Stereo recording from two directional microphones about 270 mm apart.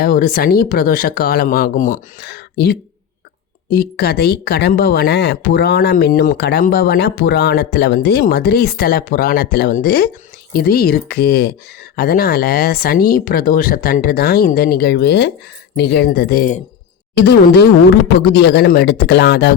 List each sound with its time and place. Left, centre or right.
0.0 s a woman's voice: left